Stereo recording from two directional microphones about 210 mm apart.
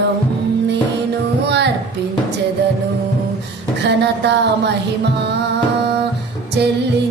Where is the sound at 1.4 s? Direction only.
55° right (ahead or behind).